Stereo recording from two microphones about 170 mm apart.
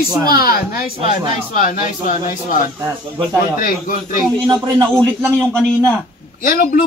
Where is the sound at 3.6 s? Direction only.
55° left (ahead or behind).